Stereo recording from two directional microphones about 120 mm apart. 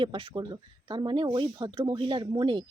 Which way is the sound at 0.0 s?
45° right (ahead or behind).